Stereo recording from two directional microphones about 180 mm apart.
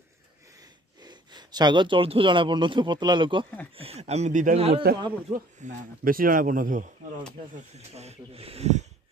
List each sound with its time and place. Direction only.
0.6 s a man's voice: 20° right (ahead or behind); by 6.9 s 50° right (ahead or behind)
7.5 s speech: 35° right (ahead or behind)